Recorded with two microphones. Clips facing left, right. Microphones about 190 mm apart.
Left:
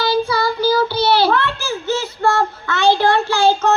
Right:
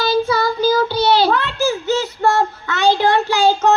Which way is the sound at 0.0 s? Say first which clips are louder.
Right 1 dB; 20° right (ahead or behind).